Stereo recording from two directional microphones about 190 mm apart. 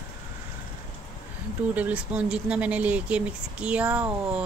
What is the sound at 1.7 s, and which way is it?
Speech, 5° right (ahead or behind).